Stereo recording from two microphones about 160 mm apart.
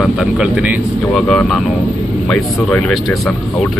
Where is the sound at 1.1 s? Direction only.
5° left (ahead or behind).